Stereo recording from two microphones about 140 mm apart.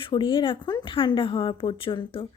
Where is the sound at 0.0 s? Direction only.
35° left (ahead or behind).